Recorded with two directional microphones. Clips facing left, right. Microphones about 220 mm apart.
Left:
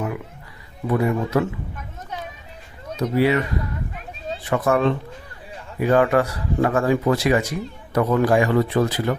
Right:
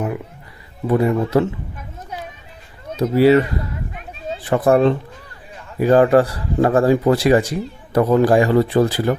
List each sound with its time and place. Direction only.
0.9 s speech: 30° right (ahead or behind)
3.0 s speech: 35° right (ahead or behind)
4.4 s speech: 35° right (ahead or behind)